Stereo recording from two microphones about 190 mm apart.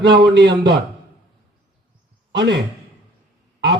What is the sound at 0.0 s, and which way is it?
Speech, 65° right (ahead or behind).